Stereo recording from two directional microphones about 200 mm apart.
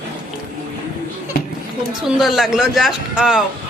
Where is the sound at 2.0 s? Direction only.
Centre (ahead or behind).